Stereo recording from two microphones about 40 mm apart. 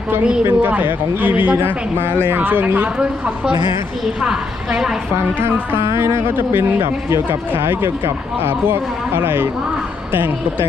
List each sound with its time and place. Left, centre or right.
0.6 s speech: right
2.0 s speech: right
2.4 s speech: right
4.2 s a woman's voice: centre
5.1 s speech: right
5.7 s a man's voice: right